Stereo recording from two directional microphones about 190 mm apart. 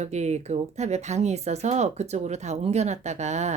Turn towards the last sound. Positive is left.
turn(degrees=-35)  # may be behind; listen again after turning